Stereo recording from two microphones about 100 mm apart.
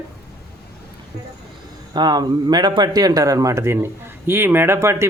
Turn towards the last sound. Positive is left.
turn(degrees=-30)  # may be behind; listen again after turning